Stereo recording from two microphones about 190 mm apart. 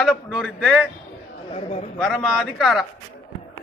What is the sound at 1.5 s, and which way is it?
Speech, 35° left (ahead or behind).